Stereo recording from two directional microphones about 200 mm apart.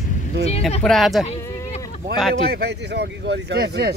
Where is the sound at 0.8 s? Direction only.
Centre (ahead or behind).